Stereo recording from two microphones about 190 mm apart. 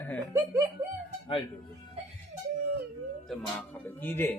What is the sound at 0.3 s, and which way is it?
Speech, 15° right (ahead or behind).